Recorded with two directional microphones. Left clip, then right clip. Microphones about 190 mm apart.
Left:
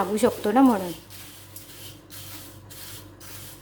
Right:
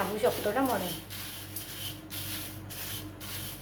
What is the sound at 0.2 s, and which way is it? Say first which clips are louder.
Speech: left 5 dB; 65° left (ahead or behind).